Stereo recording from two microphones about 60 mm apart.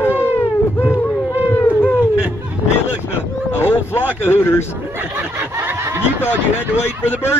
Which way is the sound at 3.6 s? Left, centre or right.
Left.